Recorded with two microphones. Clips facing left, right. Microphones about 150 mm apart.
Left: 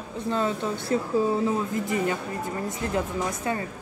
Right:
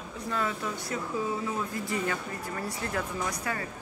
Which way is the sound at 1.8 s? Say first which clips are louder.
Left 5 dB; 20° left (ahead or behind).